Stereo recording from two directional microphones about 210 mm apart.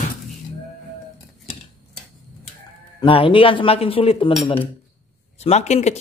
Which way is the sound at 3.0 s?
25° left (ahead or behind).